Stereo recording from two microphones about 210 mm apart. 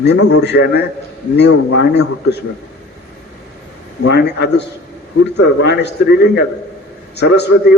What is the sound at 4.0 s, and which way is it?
A man's voice, 55° left (ahead or behind).